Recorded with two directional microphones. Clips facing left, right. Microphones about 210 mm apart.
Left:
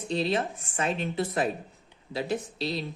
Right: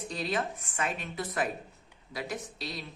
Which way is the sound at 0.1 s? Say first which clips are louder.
Left 6 dB; 25° left (ahead or behind).